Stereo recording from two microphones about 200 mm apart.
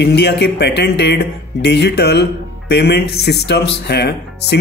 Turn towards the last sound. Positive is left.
turn(degrees=55)  # may be behind; listen again after turning